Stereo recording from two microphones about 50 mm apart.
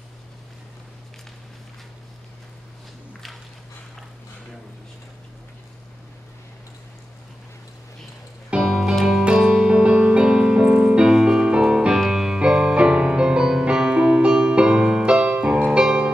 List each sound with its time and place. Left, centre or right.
8.6 s music: centre